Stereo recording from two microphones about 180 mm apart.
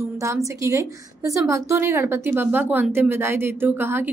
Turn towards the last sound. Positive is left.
turn(degrees=-10)  # may be behind; listen again after turning